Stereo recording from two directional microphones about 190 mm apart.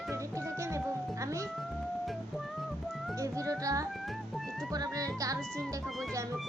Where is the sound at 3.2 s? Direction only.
15° right (ahead or behind).